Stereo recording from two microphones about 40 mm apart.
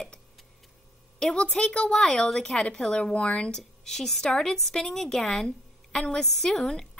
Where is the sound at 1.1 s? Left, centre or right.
Left.